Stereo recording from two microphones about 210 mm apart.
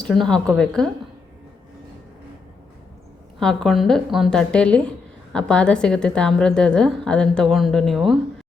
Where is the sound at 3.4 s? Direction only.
Centre (ahead or behind).